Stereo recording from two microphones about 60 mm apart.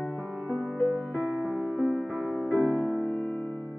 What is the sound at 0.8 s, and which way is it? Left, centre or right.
Music, right.